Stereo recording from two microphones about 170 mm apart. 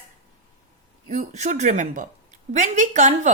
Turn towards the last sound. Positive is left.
turn(degrees=-45)  # may be behind; listen again after turning